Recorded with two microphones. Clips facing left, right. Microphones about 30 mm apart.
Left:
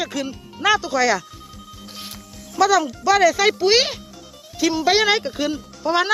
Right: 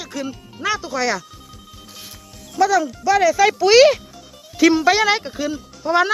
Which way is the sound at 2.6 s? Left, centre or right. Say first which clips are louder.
Even; left.